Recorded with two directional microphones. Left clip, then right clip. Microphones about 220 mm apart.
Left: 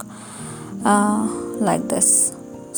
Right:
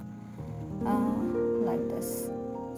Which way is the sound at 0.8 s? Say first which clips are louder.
Left 12 dB; 40° left (ahead or behind).